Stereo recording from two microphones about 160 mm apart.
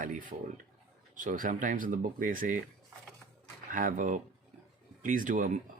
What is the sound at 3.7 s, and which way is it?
Speech, 55° right (ahead or behind).